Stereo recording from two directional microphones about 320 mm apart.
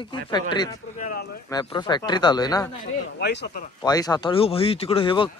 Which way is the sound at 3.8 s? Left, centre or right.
Centre.